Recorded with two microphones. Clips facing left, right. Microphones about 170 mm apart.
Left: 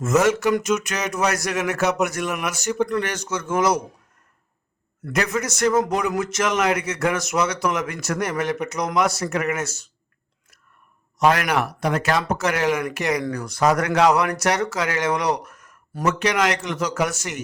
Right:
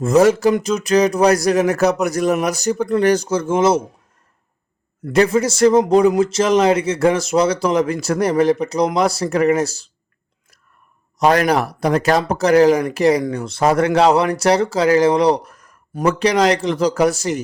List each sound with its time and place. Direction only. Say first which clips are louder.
0.0 s speech: right 6 dB; 35° right (ahead or behind)
5.1 s a man's voice: right 9 dB; 30° right (ahead or behind)
11.2 s speech: right 4 dB; 35° right (ahead or behind)